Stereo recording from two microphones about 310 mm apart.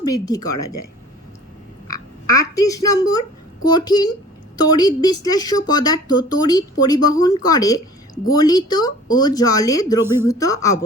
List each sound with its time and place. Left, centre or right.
0.0 s a woman's voice: centre
1.9 s frog: centre
3.6 s speech: centre